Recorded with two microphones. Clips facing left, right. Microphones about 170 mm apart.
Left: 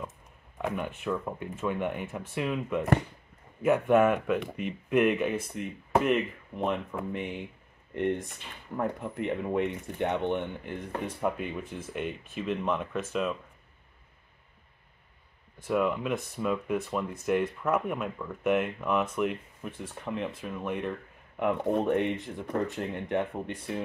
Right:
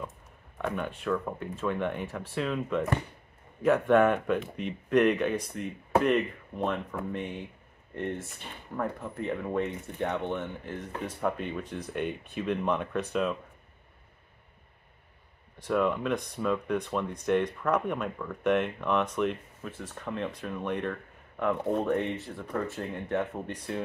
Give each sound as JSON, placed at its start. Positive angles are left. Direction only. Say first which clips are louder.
{"t": 0.6, "sound": "speech", "louder": "even", "side_deg": 5}
{"t": 7.9, "sound": "speech", "louder": "left 5 dB", "side_deg": 20}
{"t": 11.1, "sound": "speech", "louder": "right 1 dB", "side_deg": 10}
{"t": 15.6, "sound": "speech", "louder": "even", "side_deg": 5}
{"t": 21.4, "sound": "speech", "louder": "left 1 dB", "side_deg": 15}